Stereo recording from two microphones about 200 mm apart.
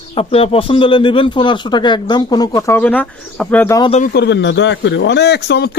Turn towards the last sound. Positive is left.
turn(degrees=55)  # may be behind; listen again after turning